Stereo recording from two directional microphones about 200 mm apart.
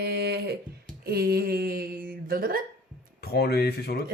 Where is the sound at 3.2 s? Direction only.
55° left (ahead or behind).